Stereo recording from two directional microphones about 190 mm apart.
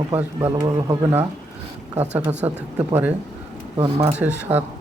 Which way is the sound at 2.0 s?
10° right (ahead or behind).